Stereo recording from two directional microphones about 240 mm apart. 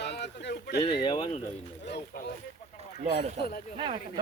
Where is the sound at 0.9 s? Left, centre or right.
Left.